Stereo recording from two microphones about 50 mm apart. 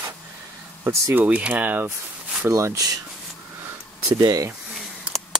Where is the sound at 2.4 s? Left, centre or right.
Right.